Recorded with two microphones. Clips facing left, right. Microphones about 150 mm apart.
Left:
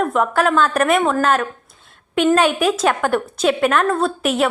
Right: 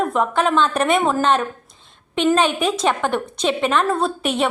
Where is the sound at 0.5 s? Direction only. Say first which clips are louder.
Left 1 dB; 25° right (ahead or behind).